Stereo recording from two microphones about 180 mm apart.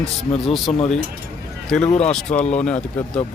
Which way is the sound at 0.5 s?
Centre (ahead or behind).